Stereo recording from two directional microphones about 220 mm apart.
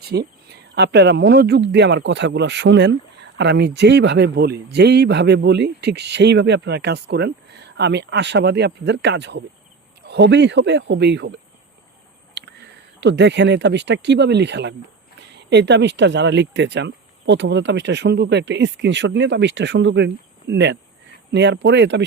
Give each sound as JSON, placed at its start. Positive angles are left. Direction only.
{"t": 0.1, "sound": "speech", "side_deg": -45}